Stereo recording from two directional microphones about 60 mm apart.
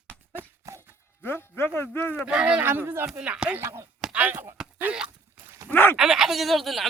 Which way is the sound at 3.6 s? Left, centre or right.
Right.